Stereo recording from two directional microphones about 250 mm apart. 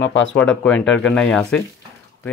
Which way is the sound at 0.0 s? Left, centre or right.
Left.